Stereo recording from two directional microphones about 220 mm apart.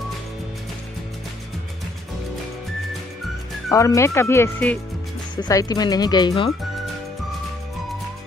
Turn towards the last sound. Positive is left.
turn(degrees=20)  # may be behind; listen again after turning